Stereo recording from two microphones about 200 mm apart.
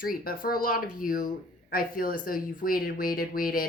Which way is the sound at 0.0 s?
45° left (ahead or behind).